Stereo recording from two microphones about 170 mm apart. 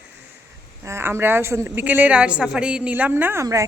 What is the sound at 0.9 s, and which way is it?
A woman's voice, 15° right (ahead or behind).